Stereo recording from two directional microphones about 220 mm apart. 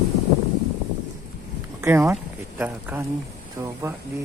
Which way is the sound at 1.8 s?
10° right (ahead or behind).